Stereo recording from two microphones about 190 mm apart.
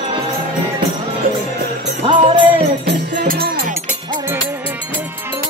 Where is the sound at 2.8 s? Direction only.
65° right (ahead or behind).